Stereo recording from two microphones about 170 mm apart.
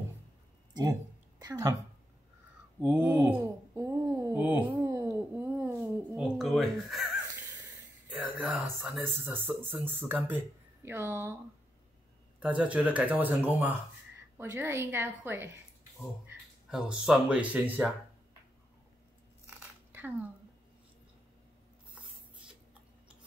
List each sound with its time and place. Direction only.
0.8 s a woman's voice: 25° right (ahead or behind)
2.8 s a sound: 10° right (ahead or behind)
8.1 s speech: 5° right (ahead or behind)
12.4 s speech: 5° right (ahead or behind)
16.7 s speech: 5° right (ahead or behind)
19.4 s a sound: 10° right (ahead or behind)